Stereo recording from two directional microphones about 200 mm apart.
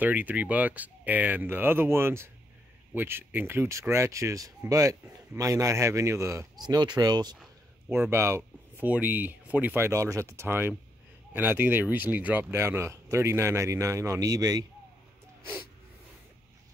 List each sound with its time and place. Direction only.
0.0 s speech: 10° right (ahead or behind)